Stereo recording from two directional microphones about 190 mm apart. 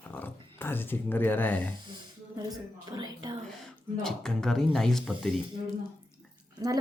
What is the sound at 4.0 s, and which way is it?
A woman's voice, 5° left (ahead or behind).